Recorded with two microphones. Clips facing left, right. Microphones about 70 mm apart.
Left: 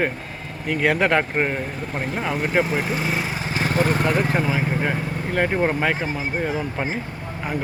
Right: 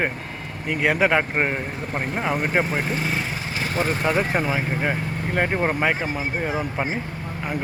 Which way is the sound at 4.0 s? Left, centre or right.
Centre.